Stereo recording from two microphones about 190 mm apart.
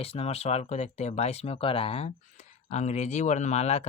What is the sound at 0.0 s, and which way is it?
Speech, 30° left (ahead or behind).